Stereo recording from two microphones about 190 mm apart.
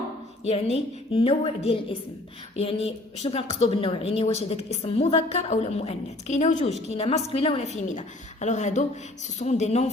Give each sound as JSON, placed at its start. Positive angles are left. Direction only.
{"t": 0.4, "sound": "speech", "side_deg": 30}